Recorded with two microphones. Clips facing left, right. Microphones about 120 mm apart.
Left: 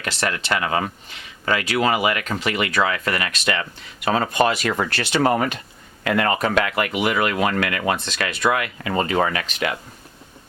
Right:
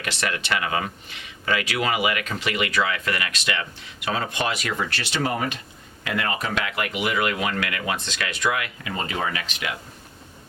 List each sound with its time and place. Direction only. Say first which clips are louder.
0.0 s speech: left 3 dB; 35° left (ahead or behind)